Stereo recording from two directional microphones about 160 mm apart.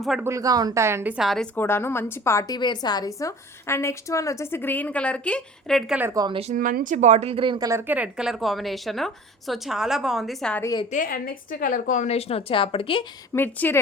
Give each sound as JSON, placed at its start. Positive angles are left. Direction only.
{"t": 0.0, "sound": "a woman's voice", "side_deg": 0}
{"t": 0.3, "sound": "speech", "side_deg": -20}
{"t": 1.5, "sound": "a woman's voice", "side_deg": 15}
{"t": 6.0, "sound": "speech", "side_deg": -15}
{"t": 6.5, "sound": "speech", "side_deg": -55}
{"t": 7.7, "sound": "a woman's voice", "side_deg": -15}
{"t": 10.6, "sound": "a woman's voice", "side_deg": 25}
{"t": 10.9, "sound": "a woman's voice", "side_deg": 60}
{"t": 13.3, "sound": "a woman's voice", "side_deg": 10}